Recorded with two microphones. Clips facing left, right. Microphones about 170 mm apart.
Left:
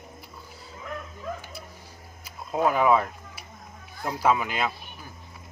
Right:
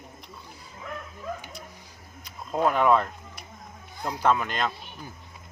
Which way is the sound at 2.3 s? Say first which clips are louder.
Even; 5° left (ahead or behind).